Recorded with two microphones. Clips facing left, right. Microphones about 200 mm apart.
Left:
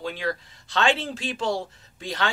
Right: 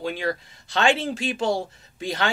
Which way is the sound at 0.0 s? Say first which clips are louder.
Right 2 dB; 10° right (ahead or behind).